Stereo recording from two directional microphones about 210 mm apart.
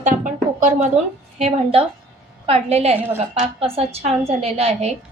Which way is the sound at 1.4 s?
30° right (ahead or behind).